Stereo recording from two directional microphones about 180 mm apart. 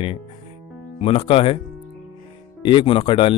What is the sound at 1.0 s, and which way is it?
Speech, 30° left (ahead or behind).